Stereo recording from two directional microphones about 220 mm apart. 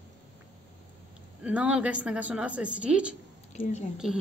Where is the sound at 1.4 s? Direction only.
5° right (ahead or behind).